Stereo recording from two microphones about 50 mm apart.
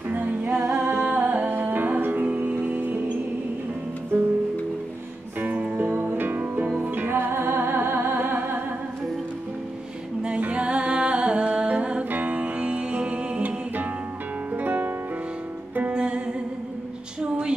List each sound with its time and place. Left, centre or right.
0.1 s music: right
0.6 s a capella: right
1.1 s music: right
2.2 s music: right
5.4 s music: right
7.2 s music: right
10.2 s music: right
14.5 s music: right
15.9 s music: right
17.2 s a sound: centre